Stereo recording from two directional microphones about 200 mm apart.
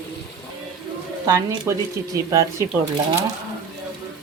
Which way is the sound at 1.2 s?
20° right (ahead or behind).